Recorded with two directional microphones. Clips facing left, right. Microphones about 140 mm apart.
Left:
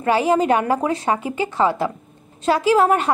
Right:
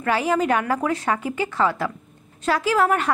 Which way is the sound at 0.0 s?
25° left (ahead or behind).